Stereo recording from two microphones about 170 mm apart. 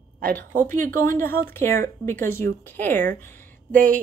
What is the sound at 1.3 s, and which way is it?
Speech, 15° left (ahead or behind).